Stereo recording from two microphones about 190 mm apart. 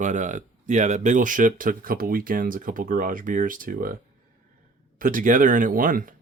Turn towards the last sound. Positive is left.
turn(degrees=-45)  # may be behind; listen again after turning